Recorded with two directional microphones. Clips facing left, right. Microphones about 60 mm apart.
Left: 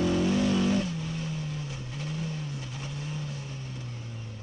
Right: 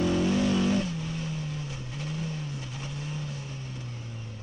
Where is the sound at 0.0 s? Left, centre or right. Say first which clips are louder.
Even; right.